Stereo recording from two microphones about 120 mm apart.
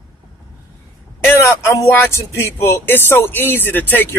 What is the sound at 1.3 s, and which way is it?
Speech, 20° left (ahead or behind).